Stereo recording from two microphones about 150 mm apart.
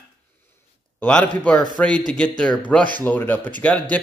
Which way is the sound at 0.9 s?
10° left (ahead or behind).